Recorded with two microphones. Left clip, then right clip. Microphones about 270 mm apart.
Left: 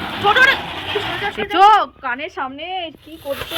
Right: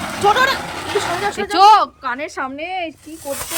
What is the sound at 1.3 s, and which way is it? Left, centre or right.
A woman's voice, centre.